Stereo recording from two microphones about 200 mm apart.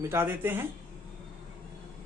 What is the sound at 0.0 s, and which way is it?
Speech, 10° right (ahead or behind).